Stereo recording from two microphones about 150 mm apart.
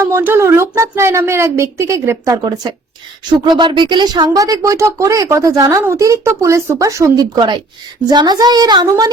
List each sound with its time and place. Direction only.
0.0 s a woman's voice: 15° right (ahead or behind)